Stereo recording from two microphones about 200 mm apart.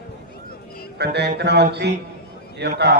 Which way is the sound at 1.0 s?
55° right (ahead or behind).